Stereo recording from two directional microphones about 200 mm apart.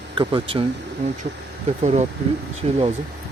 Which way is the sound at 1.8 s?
35° right (ahead or behind).